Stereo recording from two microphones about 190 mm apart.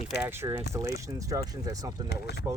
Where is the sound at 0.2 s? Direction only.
10° right (ahead or behind).